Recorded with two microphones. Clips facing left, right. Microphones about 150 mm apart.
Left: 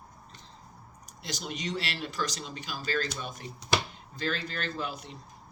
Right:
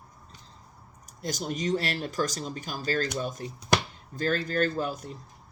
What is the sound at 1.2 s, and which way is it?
Speech, 45° right (ahead or behind).